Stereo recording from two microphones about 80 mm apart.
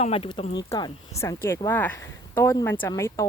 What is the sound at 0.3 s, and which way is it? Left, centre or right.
Speech, left.